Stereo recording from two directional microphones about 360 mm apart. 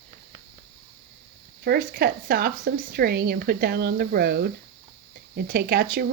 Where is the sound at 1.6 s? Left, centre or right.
Right.